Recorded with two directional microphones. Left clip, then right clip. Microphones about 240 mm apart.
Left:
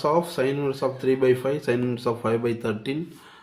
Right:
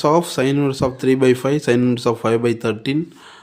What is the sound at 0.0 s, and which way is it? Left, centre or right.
Speech, right.